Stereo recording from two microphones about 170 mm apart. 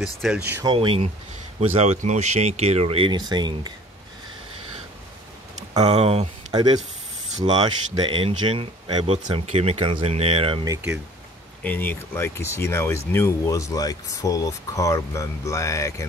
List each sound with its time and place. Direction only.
0.2 s speech: 5° right (ahead or behind)
0.7 s speech: 30° right (ahead or behind)
5.9 s speech: 40° right (ahead or behind)
6.5 s speech: 20° right (ahead or behind)
11.6 s speech: 10° left (ahead or behind)